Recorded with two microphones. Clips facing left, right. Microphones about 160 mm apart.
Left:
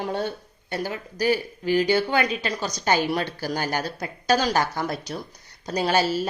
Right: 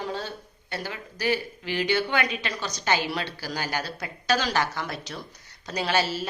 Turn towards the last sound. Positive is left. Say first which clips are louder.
# left 4 dB
turn(degrees=40)  # may be behind; listen again after turning